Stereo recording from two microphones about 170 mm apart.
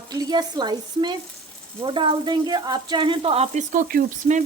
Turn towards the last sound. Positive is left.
turn(degrees=-45)  # may be behind; listen again after turning